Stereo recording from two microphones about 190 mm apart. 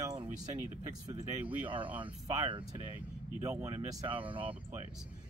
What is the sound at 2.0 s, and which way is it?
Speech, 25° right (ahead or behind).